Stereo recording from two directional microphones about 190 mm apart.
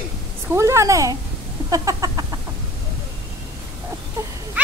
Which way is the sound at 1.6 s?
20° right (ahead or behind).